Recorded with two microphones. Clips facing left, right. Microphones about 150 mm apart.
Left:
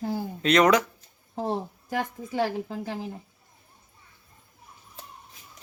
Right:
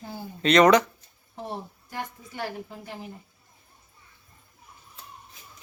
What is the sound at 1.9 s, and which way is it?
A woman's voice, 90° left.